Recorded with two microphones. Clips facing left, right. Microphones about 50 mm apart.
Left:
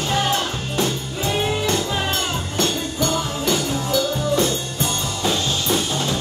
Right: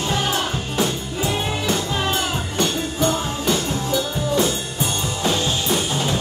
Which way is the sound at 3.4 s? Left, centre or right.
Centre.